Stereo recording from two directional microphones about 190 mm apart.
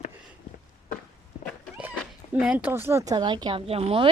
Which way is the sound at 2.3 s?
5° right (ahead or behind).